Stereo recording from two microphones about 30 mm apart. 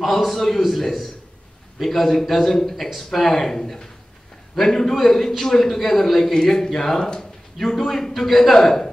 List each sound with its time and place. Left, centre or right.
0.1 s a man's voice: centre